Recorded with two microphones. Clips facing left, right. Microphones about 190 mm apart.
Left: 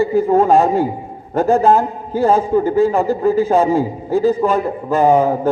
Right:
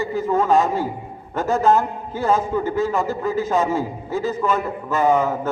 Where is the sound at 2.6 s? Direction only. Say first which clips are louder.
Left 7 dB; 45° left (ahead or behind).